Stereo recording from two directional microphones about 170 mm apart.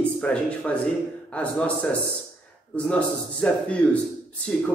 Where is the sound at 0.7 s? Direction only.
5° left (ahead or behind).